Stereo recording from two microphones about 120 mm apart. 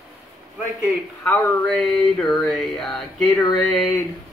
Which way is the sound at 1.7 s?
5° left (ahead or behind).